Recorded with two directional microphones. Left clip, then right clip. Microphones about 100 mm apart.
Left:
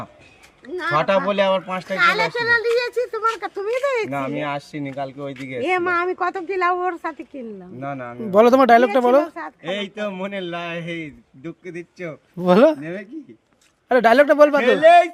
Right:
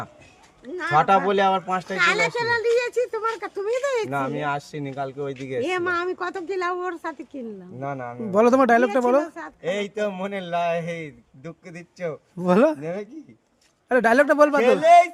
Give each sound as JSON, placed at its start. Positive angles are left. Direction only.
{"t": 0.7, "sound": "speech", "side_deg": 5}
{"t": 0.9, "sound": "a man's voice", "side_deg": -40}
{"t": 2.0, "sound": "speech", "side_deg": 10}
{"t": 4.4, "sound": "a man's voice", "side_deg": -50}
{"t": 5.5, "sound": "speech", "side_deg": 0}
{"t": 7.8, "sound": "a man's voice", "side_deg": -40}
{"t": 8.3, "sound": "speech", "side_deg": 0}
{"t": 9.6, "sound": "a man's voice", "side_deg": -50}
{"t": 12.4, "sound": "speech", "side_deg": 0}
{"t": 12.8, "sound": "a man's voice", "side_deg": -40}
{"t": 13.8, "sound": "a man's voice", "side_deg": 0}
{"t": 14.3, "sound": "speech", "side_deg": -15}
{"t": 14.6, "sound": "a man's voice", "side_deg": -40}